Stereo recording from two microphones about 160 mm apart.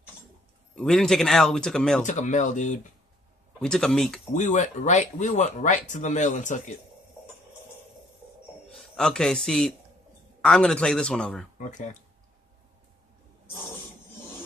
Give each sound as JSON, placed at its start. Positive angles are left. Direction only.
{"t": 0.7, "sound": "speech", "side_deg": 5}
{"t": 2.0, "sound": "speech", "side_deg": 50}
{"t": 3.5, "sound": "speech", "side_deg": 5}
{"t": 4.3, "sound": "speech", "side_deg": 50}
{"t": 8.9, "sound": "speech", "side_deg": 5}
{"t": 11.5, "sound": "speech", "side_deg": 50}